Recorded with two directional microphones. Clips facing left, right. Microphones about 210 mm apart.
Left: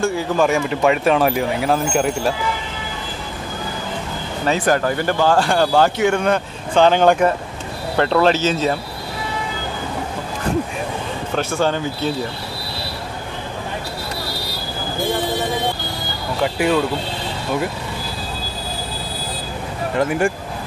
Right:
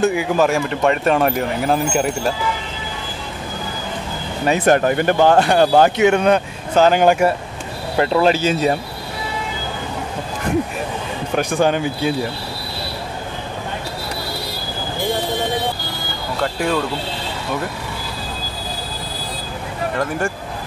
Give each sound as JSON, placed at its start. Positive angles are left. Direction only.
{"t": 0.0, "sound": "speech", "side_deg": -15}
{"t": 0.5, "sound": "speech", "side_deg": 0}
{"t": 4.6, "sound": "speech", "side_deg": -20}
{"t": 6.7, "sound": "speech", "side_deg": -5}
{"t": 11.3, "sound": "speech", "side_deg": -15}
{"t": 16.3, "sound": "speech", "side_deg": 5}
{"t": 20.0, "sound": "speech", "side_deg": 15}